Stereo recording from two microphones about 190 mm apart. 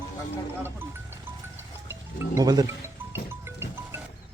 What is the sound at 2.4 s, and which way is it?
Speech, 20° right (ahead or behind).